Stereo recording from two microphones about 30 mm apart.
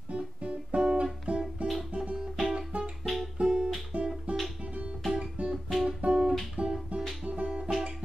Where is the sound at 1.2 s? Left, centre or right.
Right.